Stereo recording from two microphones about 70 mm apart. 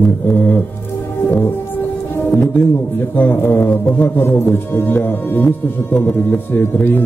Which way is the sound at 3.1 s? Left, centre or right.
Left.